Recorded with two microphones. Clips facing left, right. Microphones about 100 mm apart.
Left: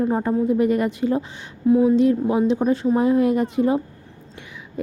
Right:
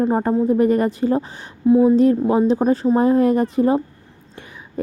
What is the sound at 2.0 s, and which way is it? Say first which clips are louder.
A woman's voice: right 3 dB; 40° right (ahead or behind).